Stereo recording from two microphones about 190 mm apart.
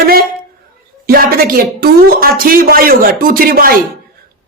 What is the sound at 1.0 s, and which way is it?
A woman's voice, 50° right (ahead or behind).